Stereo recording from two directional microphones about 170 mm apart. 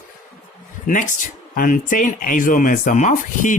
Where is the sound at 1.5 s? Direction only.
50° left (ahead or behind).